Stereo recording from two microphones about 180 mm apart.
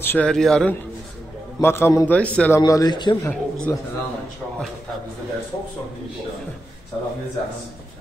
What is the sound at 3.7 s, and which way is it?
Speech, 10° left (ahead or behind).